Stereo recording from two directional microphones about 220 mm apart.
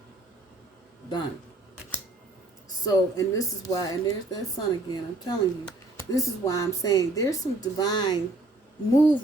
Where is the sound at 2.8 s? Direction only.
15° left (ahead or behind).